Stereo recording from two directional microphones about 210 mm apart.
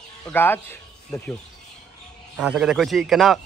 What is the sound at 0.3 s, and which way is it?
Speech, 10° left (ahead or behind).